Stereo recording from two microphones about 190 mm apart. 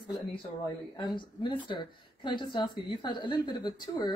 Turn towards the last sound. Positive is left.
turn(degrees=25)  # may be behind; listen again after turning